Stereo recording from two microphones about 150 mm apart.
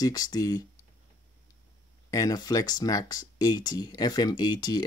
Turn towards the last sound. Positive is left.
turn(degrees=30)  # may be behind; listen again after turning